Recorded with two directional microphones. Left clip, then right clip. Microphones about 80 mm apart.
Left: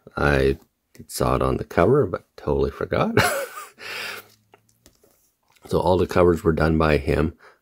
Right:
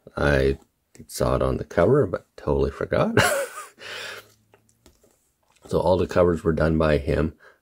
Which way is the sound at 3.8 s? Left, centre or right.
Left.